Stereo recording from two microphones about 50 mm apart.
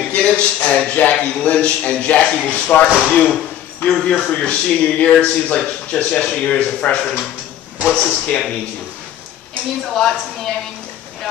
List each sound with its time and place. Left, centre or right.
0.1 s speech: left
9.9 s a woman's voice: centre